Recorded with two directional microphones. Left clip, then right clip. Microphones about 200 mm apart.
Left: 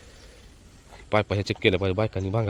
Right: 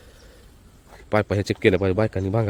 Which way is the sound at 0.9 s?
35° right (ahead or behind).